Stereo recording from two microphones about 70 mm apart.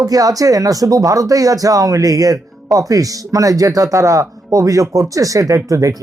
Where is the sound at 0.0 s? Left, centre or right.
Right.